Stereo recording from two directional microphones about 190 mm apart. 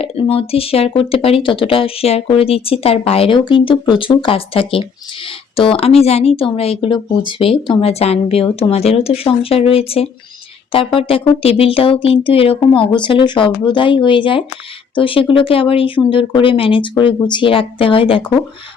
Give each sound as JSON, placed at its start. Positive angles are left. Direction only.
{"t": 0.0, "sound": "speech", "side_deg": 30}